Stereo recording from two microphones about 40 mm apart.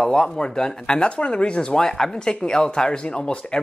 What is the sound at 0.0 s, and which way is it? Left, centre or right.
Speech, centre.